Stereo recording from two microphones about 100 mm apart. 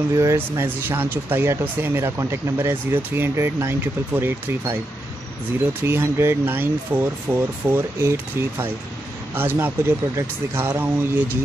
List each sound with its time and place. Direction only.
0.1 s speech: 30° right (ahead or behind)
5.9 s speech: 25° right (ahead or behind)